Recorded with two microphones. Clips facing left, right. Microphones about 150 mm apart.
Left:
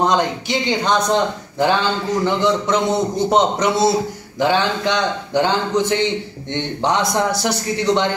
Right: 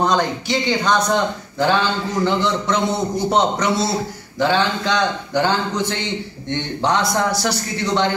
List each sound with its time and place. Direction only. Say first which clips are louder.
0.0 s a man's voice: left 1 dB; 20° left (ahead or behind)